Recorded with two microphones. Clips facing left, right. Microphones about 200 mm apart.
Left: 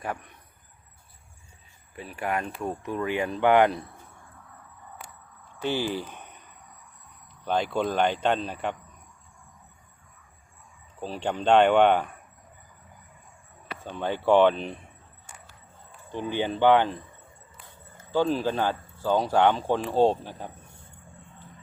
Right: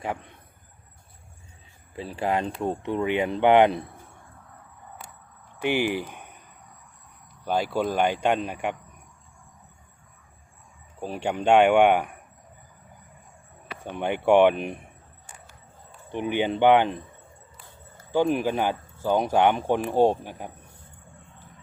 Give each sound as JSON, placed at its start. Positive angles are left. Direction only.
{"t": 0.0, "sound": "speech", "side_deg": -25}
{"t": 2.0, "sound": "speech", "side_deg": -30}
{"t": 5.5, "sound": "speech", "side_deg": -15}
{"t": 7.4, "sound": "speech", "side_deg": -5}
{"t": 11.0, "sound": "speech", "side_deg": -10}
{"t": 13.7, "sound": "speech", "side_deg": -15}
{"t": 16.0, "sound": "speech", "side_deg": -15}
{"t": 18.1, "sound": "speech", "side_deg": -15}